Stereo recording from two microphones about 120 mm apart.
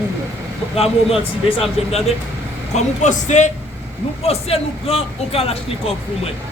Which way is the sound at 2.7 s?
85° left.